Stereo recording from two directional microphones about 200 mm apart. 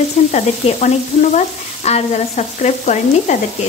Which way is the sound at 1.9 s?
35° left (ahead or behind).